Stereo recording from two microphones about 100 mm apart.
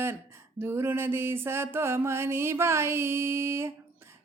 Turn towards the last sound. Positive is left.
turn(degrees=-25)  # may be behind; listen again after turning